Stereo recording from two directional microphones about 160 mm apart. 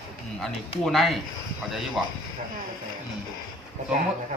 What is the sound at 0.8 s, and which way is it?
Speech, centre (ahead or behind).